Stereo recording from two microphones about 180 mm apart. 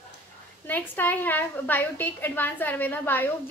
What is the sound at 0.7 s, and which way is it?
A woman's voice, 10° left (ahead or behind).